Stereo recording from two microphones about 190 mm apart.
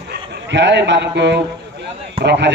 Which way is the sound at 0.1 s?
70° right (ahead or behind).